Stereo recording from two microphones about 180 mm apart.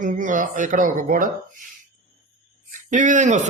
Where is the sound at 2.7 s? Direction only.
45° right (ahead or behind).